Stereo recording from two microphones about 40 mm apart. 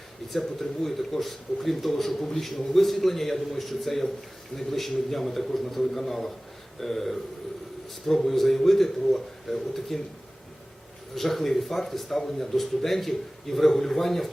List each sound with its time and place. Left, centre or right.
0.3 s speech: centre
11.1 s speech: centre